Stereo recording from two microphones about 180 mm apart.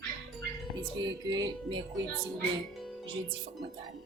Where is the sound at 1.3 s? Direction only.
25° right (ahead or behind).